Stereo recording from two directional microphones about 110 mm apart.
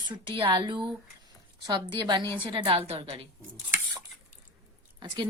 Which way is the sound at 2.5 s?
60° right (ahead or behind).